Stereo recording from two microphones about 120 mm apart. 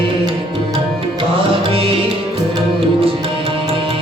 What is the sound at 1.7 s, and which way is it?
Music, 50° right (ahead or behind).